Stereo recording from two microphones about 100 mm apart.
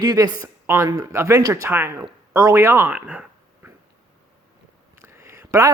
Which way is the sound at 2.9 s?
10° right (ahead or behind).